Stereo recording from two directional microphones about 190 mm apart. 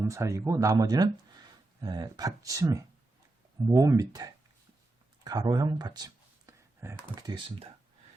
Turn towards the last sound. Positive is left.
turn(degrees=-15)  # may be behind; listen again after turning